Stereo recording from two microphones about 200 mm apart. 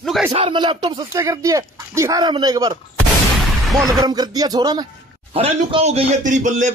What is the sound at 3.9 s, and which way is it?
Speech, 20° right (ahead or behind).